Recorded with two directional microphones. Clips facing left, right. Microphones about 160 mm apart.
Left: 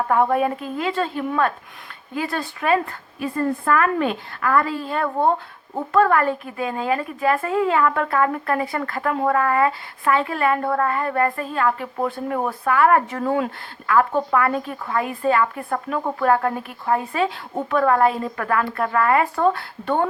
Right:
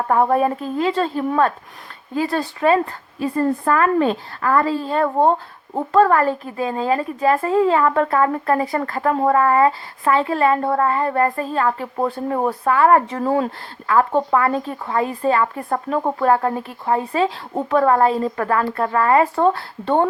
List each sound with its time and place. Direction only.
0.1 s speech: 35° right (ahead or behind)